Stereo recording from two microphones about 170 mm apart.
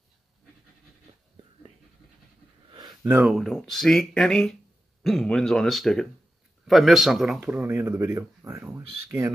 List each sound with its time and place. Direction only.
3.0 s speech: 10° right (ahead or behind)